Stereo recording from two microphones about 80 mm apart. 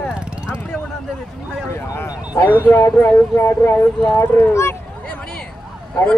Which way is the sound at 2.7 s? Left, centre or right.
Left.